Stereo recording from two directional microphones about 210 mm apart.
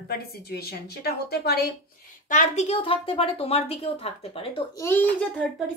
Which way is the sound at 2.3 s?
35° left (ahead or behind).